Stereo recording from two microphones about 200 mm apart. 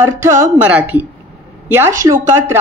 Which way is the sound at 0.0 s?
15° right (ahead or behind).